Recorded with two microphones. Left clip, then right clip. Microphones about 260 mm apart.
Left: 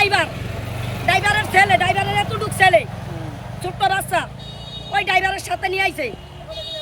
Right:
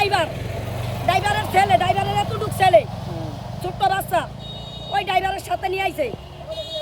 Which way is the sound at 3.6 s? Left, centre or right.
Centre.